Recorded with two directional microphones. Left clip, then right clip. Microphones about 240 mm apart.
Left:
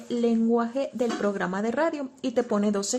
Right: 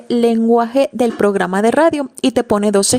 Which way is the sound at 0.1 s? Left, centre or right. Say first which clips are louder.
Right 11 dB; right.